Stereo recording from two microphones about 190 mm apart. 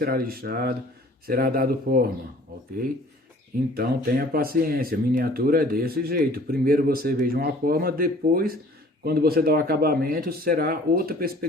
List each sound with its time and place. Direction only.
0.0 s speech: 50° right (ahead or behind)
3.8 s speech: 50° right (ahead or behind)